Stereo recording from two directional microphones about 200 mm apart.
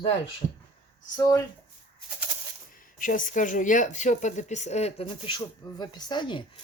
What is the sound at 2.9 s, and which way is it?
Speech, 40° left (ahead or behind).